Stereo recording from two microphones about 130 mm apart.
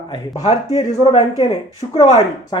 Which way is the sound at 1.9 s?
35° left (ahead or behind).